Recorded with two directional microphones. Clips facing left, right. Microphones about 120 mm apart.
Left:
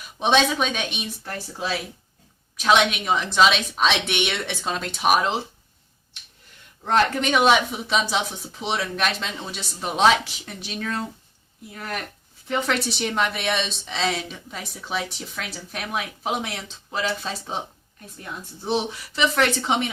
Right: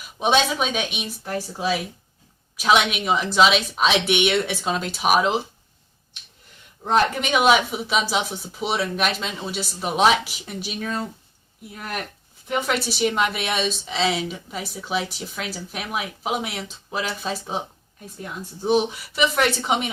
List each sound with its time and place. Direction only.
0.2 s a woman's voice: 5° right (ahead or behind)
1.3 s a woman's voice: 15° right (ahead or behind)
6.8 s a woman's voice: 10° right (ahead or behind)
12.5 s a woman's voice: 10° right (ahead or behind)
18.6 s a woman's voice: 15° right (ahead or behind)